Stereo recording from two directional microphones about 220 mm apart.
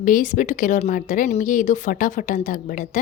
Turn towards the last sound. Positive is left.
turn(degrees=40)  # may be behind; listen again after turning